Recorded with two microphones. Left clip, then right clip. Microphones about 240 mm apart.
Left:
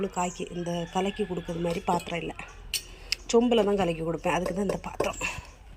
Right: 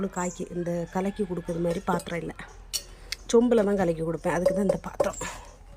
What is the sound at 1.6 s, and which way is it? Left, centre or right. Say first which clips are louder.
Speech: left 1 dB; centre.